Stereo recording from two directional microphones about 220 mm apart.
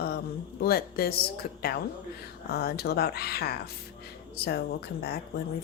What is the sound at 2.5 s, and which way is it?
Speech, 45° left (ahead or behind).